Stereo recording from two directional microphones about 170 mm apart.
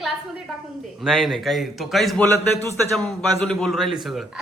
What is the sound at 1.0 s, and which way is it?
Speech, centre (ahead or behind).